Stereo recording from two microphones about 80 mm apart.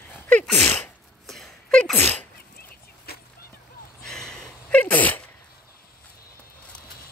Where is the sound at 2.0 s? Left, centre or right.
Left.